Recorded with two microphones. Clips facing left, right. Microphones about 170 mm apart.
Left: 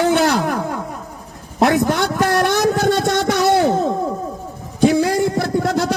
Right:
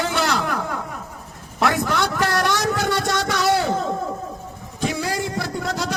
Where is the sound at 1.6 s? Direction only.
50° left (ahead or behind).